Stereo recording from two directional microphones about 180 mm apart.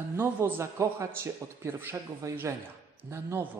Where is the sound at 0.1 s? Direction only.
15° right (ahead or behind).